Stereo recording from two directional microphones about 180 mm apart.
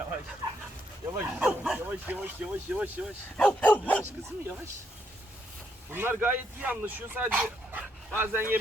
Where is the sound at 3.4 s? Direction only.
5° left (ahead or behind).